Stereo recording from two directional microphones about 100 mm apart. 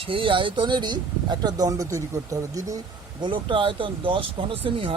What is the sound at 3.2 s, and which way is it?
Speech, 55° right (ahead or behind).